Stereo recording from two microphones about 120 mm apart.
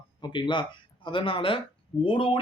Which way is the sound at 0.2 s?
40° left (ahead or behind).